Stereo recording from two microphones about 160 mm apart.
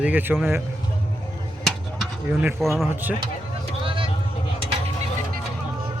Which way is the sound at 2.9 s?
10° right (ahead or behind).